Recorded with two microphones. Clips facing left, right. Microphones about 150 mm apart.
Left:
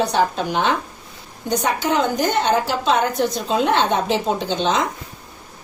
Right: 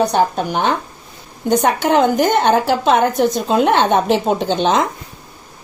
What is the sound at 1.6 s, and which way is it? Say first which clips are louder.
A woman's voice: right 5 dB; 55° right (ahead or behind).